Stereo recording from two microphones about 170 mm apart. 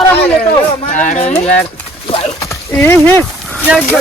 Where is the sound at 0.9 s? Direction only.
40° left (ahead or behind).